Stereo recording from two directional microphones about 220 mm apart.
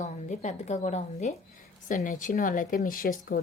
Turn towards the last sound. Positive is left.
turn(degrees=40)  # may be behind; listen again after turning